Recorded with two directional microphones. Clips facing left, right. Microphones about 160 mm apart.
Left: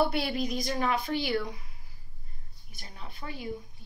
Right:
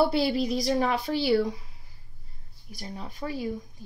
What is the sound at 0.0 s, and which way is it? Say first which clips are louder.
A woman's voice: right 4 dB; 30° right (ahead or behind).